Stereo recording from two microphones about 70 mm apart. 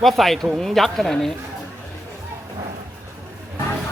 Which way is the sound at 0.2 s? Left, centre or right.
Centre.